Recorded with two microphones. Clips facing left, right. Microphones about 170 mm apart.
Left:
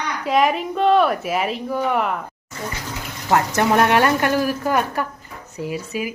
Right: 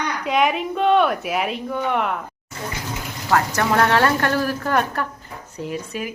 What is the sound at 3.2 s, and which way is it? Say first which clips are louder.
A woman's voice: left 2 dB; 20° left (ahead or behind).